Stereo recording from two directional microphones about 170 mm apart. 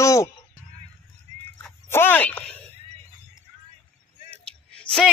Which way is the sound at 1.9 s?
10° left (ahead or behind).